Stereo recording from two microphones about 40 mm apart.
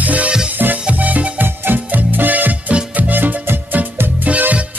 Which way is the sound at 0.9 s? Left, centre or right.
Right.